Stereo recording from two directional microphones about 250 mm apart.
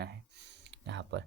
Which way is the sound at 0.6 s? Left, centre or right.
Right.